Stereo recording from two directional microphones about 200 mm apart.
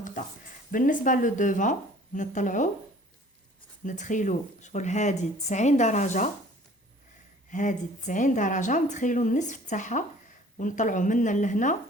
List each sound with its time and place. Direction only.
0.7 s speech: 40° left (ahead or behind)
3.8 s speech: 40° left (ahead or behind)
7.5 s speech: 40° left (ahead or behind)